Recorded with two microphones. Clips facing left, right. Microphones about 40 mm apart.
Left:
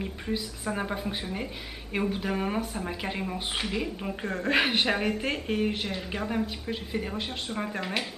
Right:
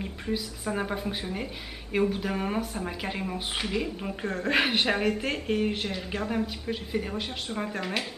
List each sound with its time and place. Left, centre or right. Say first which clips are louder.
0.0 s speech: even; centre